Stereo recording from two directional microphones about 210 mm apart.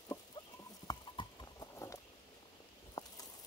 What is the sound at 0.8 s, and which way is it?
Clip-clop, 20° left (ahead or behind).